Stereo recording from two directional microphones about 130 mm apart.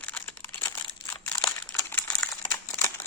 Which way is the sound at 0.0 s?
15° left (ahead or behind).